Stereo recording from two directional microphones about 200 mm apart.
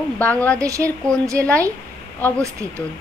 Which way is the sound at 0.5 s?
15° right (ahead or behind).